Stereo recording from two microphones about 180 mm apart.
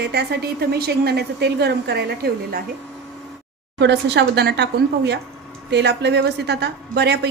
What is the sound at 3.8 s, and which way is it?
Speech, 75° right (ahead or behind).